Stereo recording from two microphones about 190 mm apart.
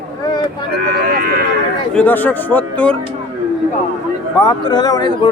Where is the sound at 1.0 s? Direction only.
50° right (ahead or behind).